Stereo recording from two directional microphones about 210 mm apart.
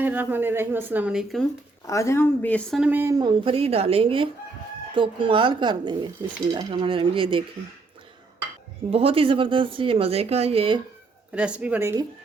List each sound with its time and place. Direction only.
0.0 s speech: 10° right (ahead or behind)
1.9 s speech: 15° left (ahead or behind); by 7.4 s 25° right (ahead or behind)
8.9 s speech: 25° right (ahead or behind)
11.3 s speech: 5° right (ahead or behind)